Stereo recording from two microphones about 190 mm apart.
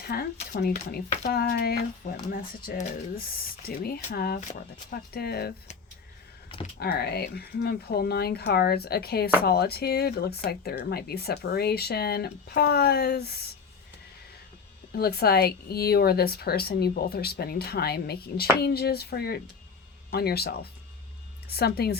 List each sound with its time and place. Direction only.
0.0 s speech: 55° left (ahead or behind)
6.7 s speech: 55° left (ahead or behind)
14.9 s speech: 55° left (ahead or behind)